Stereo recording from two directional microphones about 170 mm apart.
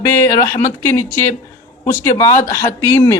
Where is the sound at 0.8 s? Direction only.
15° left (ahead or behind).